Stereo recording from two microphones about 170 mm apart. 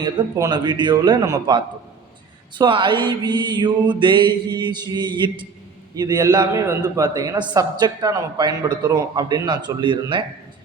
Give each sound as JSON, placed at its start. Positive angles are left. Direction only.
{"t": 0.0, "sound": "a man's voice", "side_deg": -25}